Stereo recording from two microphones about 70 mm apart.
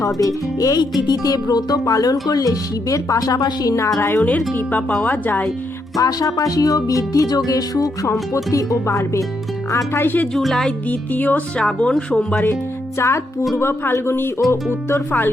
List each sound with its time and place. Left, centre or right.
0.0 s speech: left
0.8 s speech: left
3.8 s speech: left
4.3 s speech: left
6.0 s speech: left
10.0 s speech: left
10.3 s speech: centre
10.8 s speech: left
13.0 s speech: left